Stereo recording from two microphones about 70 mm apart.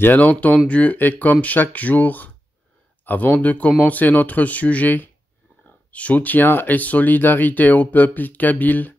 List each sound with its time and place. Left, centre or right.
0.0 s speech: left